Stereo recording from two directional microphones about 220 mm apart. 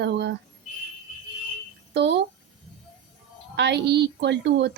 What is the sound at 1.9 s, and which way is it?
Speech, 50° right (ahead or behind).